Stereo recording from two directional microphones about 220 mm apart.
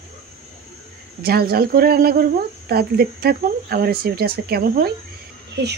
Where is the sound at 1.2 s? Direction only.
45° right (ahead or behind).